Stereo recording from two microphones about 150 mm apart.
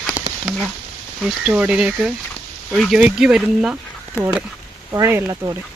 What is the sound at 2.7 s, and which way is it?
Speech, 5° left (ahead or behind).